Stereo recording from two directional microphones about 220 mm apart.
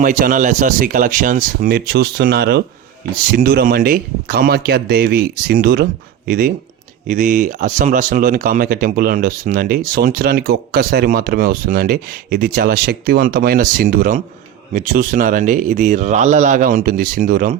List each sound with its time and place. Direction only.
0.0 s speech: 40° right (ahead or behind)